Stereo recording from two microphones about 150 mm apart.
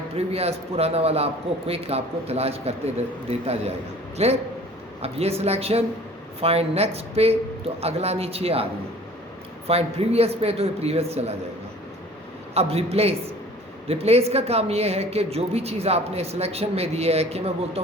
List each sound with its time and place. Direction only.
0.2 s a woman's voice: 45° right (ahead or behind)
9.6 s a woman's voice: 40° right (ahead or behind)
12.5 s a woman's voice: 45° right (ahead or behind)